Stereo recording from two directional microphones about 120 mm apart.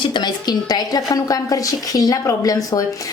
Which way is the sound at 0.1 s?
40° left (ahead or behind).